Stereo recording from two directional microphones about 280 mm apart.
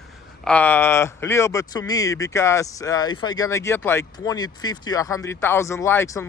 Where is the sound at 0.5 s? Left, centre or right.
Centre.